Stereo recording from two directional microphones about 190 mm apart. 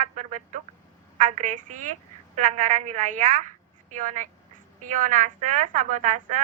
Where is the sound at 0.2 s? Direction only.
40° right (ahead or behind).